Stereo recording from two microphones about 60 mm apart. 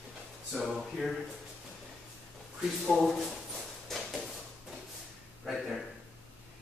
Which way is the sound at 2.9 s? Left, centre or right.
Centre.